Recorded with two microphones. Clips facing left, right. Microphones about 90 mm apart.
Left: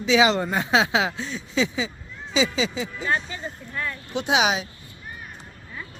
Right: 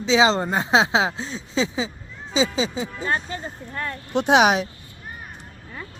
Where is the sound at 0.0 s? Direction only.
30° right (ahead or behind).